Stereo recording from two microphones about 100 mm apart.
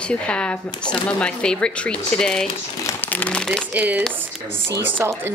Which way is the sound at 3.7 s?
15° right (ahead or behind).